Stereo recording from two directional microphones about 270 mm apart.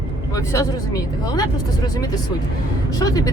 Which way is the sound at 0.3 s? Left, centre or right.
Centre.